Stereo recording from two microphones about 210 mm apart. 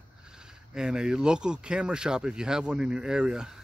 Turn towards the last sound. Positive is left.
turn(degrees=-5)  # may be behind; listen again after turning